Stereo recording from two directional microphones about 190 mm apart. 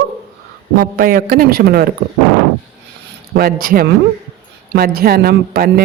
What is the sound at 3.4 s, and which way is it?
Speech, 50° right (ahead or behind).